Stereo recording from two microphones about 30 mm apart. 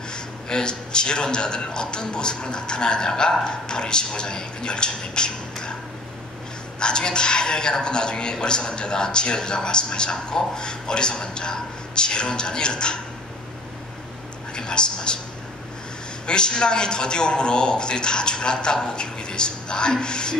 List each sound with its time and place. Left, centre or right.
0.1 s a man's voice: left
6.8 s a man's voice: left
14.5 s speech: left
16.3 s a man's voice: left